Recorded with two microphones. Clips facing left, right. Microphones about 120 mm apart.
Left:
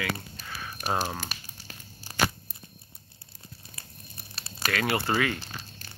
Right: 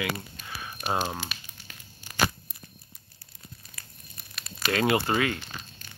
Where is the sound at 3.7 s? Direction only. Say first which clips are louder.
Left 2 dB; 30° left (ahead or behind).